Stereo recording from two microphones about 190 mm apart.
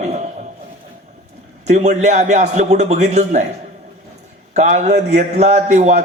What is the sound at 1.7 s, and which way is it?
A man's voice, 35° right (ahead or behind).